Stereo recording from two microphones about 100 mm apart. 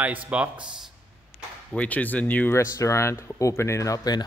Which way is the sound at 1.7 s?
15° left (ahead or behind).